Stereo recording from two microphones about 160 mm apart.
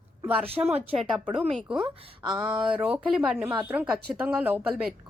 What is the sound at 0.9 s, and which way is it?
A woman's voice, 5° right (ahead or behind).